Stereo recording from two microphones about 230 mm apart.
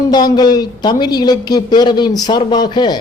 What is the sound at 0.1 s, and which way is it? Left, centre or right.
A man's voice, centre.